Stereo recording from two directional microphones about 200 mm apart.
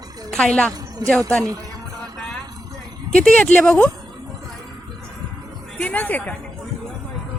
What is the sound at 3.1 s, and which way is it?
Speech, 5° left (ahead or behind).